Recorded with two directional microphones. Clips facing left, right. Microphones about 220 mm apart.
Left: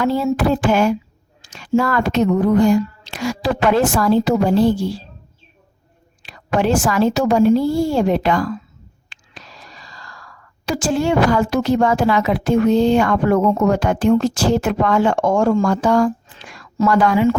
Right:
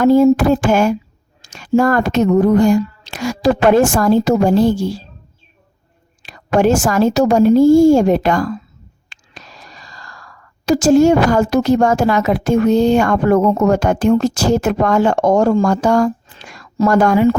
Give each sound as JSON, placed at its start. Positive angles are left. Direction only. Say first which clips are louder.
{"t": 0.0, "sound": "a woman's voice", "louder": "right 8 dB", "side_deg": -45}
{"t": 6.2, "sound": "a woman's voice", "louder": "right 4 dB", "side_deg": -45}